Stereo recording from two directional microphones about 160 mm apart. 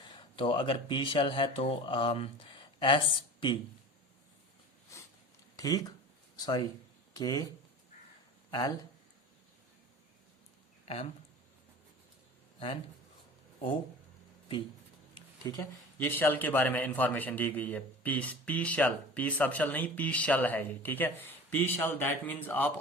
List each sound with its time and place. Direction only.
0.1 s speech: 30° left (ahead or behind)
5.5 s speech: 25° left (ahead or behind)
8.4 s speech: 25° left (ahead or behind)
12.5 s speech: 35° left (ahead or behind)
15.1 s a sound: 25° left (ahead or behind)
16.0 s a man's voice: 15° left (ahead or behind)